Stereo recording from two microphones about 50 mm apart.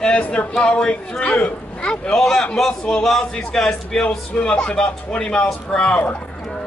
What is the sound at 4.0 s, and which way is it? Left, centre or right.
A man's voice, left.